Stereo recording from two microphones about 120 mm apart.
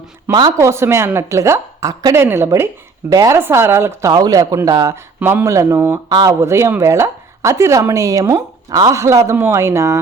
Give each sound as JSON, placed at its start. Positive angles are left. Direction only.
{"t": 0.3, "sound": "a man's voice", "side_deg": -30}
{"t": 4.1, "sound": "a man's voice", "side_deg": -30}